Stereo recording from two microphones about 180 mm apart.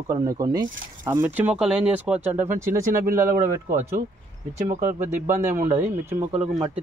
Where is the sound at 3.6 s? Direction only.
40° right (ahead or behind).